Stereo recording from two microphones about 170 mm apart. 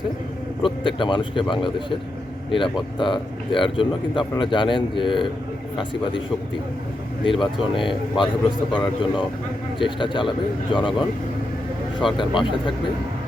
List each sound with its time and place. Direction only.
0.6 s speech: 30° left (ahead or behind)
3.0 s speech: 30° left (ahead or behind)
7.3 s speech: 30° left (ahead or behind)
12.1 s speech: 30° left (ahead or behind)